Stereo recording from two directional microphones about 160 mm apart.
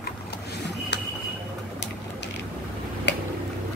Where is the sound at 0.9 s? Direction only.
90° left.